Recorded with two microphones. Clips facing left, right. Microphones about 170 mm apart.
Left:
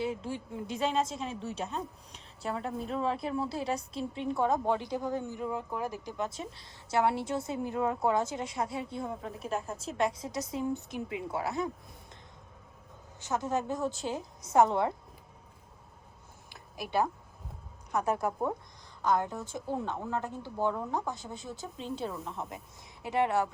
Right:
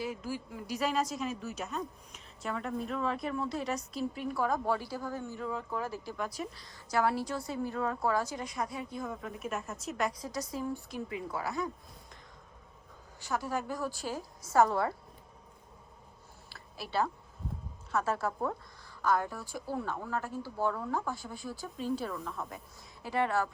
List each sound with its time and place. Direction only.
0.0 s a woman's voice: 25° left (ahead or behind)
10.1 s a woman's voice: centre (ahead or behind)
10.5 s a woman's voice: 20° left (ahead or behind)
13.1 s a woman's voice: 20° left (ahead or behind)
16.5 s a sound: 15° left (ahead or behind)
17.9 s a woman's voice: 15° left (ahead or behind)